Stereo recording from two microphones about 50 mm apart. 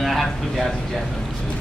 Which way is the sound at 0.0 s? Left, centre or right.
Centre.